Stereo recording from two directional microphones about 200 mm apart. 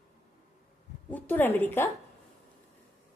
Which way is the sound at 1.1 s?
10° left (ahead or behind).